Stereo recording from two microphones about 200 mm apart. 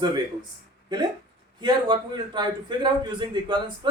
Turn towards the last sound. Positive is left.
turn(degrees=-20)  # may be behind; listen again after turning